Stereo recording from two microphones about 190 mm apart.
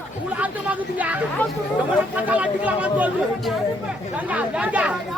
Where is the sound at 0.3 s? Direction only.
10° right (ahead or behind).